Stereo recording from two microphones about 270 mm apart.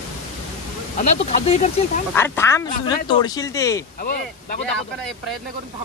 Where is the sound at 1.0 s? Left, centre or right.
Left.